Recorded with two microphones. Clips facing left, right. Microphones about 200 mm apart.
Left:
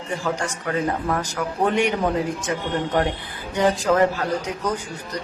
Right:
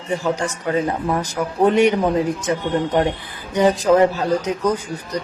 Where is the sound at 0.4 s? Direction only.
20° right (ahead or behind).